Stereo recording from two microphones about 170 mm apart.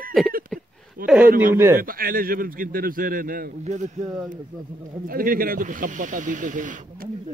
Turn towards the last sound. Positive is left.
turn(degrees=-50)  # may be behind; listen again after turning